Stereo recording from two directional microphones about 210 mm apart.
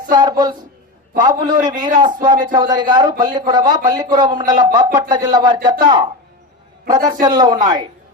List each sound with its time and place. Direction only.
0.1 s speech: 20° right (ahead or behind)